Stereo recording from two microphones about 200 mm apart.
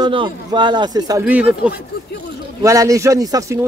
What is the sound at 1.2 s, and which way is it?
Speech, 5° right (ahead or behind).